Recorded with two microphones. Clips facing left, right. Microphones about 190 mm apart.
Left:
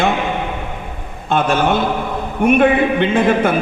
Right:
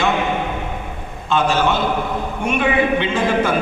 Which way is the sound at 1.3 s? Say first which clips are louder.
Left 2 dB; 55° left (ahead or behind).